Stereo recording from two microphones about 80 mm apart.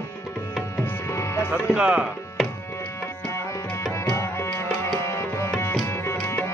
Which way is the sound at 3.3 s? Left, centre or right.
Left.